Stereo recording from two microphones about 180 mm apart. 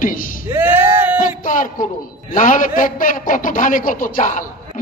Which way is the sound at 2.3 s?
45° left (ahead or behind).